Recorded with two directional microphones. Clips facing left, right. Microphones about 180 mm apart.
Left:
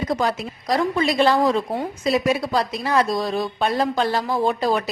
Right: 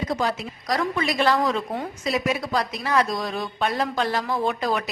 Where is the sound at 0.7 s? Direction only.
30° left (ahead or behind).